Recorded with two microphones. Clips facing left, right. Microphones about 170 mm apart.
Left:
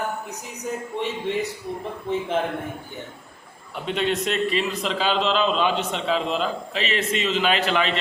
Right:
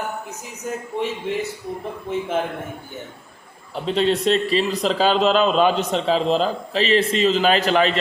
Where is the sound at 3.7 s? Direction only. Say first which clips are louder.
Right 5 dB; 30° right (ahead or behind).